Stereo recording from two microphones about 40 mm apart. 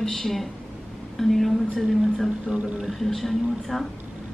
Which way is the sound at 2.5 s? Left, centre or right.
Right.